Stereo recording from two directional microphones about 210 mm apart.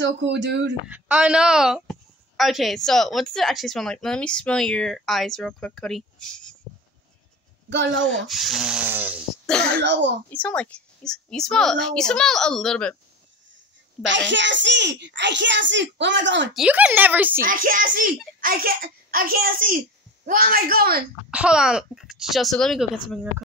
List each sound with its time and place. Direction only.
0.0 s a child's voice: 60° right (ahead or behind)
0.8 s a woman's voice: 5° right (ahead or behind)
7.7 s a child's voice: 60° right (ahead or behind)
8.2 s a woman's voice: centre (ahead or behind)
9.8 s a child's voice: 55° right (ahead or behind)
10.3 s a woman's voice: 5° left (ahead or behind)
14.0 s a child's voice: 60° right (ahead or behind)
16.5 s speech: 5° right (ahead or behind)
17.4 s a child's voice: 40° right (ahead or behind)
21.3 s a woman's voice: 5° right (ahead or behind)